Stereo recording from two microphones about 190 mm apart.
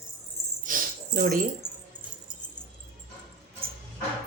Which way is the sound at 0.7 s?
45° right (ahead or behind).